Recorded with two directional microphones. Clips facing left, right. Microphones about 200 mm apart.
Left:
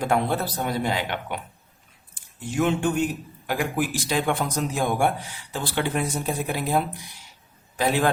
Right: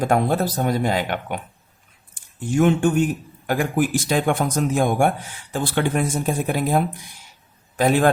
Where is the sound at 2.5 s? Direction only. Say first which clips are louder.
Right 5 dB; 50° right (ahead or behind).